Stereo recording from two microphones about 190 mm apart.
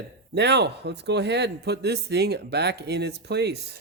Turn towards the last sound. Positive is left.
turn(degrees=-60)  # may be behind; listen again after turning